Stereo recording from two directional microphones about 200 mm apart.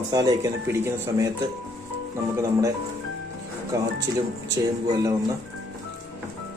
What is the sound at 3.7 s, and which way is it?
Speech, 15° right (ahead or behind).